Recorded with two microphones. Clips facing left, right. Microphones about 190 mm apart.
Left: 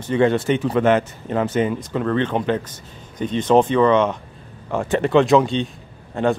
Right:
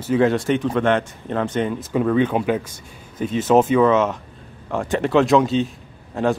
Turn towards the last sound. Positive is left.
turn(degrees=0)  # may be behind; listen again after turning